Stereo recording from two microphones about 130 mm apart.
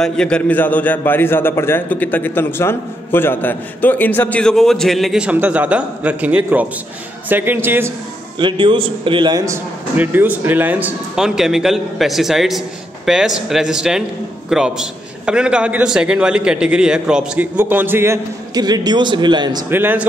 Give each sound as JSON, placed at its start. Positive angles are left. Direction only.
{"t": 0.0, "sound": "a man's voice", "side_deg": 5}
{"t": 8.4, "sound": "a man's voice", "side_deg": -40}
{"t": 9.4, "sound": "a man's voice", "side_deg": -20}
{"t": 18.6, "sound": "a man's voice", "side_deg": -30}
{"t": 19.7, "sound": "a man's voice", "side_deg": -15}